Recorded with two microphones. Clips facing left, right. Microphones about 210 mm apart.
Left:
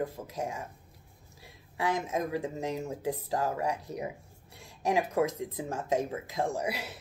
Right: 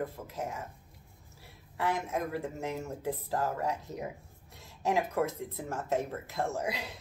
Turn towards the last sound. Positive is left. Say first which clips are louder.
# left 2 dB
turn(degrees=10)  # may be behind; listen again after turning